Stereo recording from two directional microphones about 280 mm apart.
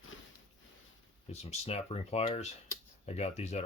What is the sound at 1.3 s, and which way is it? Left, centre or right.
Speech, left.